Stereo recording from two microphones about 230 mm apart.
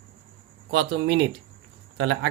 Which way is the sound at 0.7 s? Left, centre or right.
Right.